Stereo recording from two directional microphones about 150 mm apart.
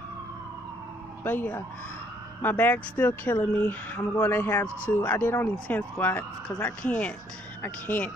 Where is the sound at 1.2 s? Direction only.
15° left (ahead or behind).